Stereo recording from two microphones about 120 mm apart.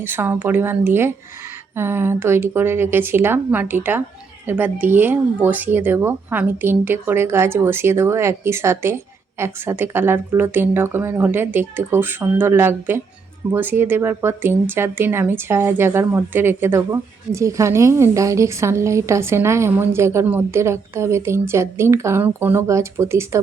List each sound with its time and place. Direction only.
0.0 s speech: 20° right (ahead or behind)